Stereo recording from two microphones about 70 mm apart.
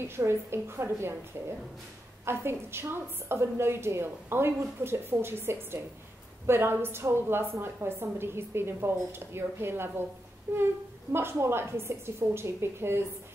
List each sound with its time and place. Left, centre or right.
0.0 s a woman's voice: right
2.2 s a woman's voice: right